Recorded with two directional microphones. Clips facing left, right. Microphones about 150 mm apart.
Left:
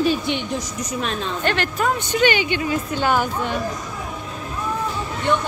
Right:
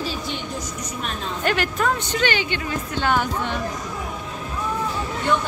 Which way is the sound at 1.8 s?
15° left (ahead or behind).